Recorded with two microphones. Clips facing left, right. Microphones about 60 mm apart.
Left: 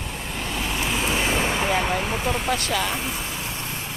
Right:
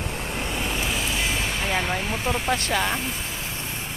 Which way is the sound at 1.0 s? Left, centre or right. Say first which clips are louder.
Left 4 dB; left.